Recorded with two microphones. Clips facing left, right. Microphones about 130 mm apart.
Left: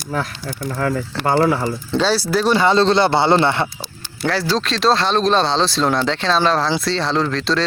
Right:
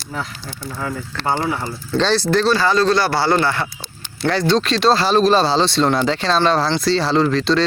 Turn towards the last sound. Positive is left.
turn(degrees=0)  # may be behind; listen again after turning